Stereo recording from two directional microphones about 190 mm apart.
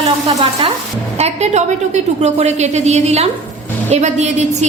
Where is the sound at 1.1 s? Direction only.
35° right (ahead or behind).